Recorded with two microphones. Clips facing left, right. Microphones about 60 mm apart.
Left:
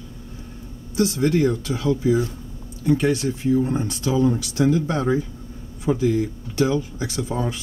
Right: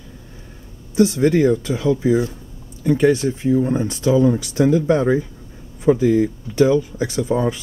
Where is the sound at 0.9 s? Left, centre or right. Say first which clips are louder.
Right 5 dB; right.